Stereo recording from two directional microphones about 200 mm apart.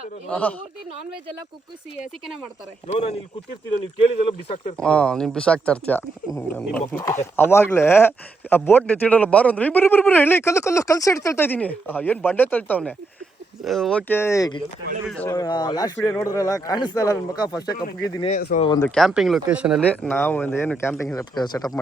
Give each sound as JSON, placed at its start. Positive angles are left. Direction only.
{"t": 0.3, "sound": "speech", "side_deg": 10}
{"t": 2.8, "sound": "speech", "side_deg": 35}
{"t": 4.3, "sound": "speech", "side_deg": 30}
{"t": 4.8, "sound": "speech", "side_deg": 5}
{"t": 15.4, "sound": "speech", "side_deg": 20}
{"t": 18.3, "sound": "speech", "side_deg": 40}
{"t": 18.8, "sound": "speech", "side_deg": 5}
{"t": 19.8, "sound": "speech", "side_deg": 5}